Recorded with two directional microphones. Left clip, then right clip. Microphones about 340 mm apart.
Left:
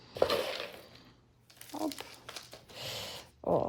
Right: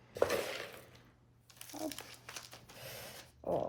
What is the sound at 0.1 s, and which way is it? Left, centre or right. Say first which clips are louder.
Walk: left 4 dB; centre.